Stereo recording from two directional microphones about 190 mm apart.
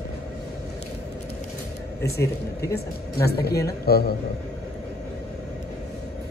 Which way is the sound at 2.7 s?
55° left (ahead or behind).